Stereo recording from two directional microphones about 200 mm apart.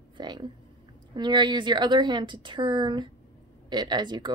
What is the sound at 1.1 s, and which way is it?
Speech, 20° right (ahead or behind).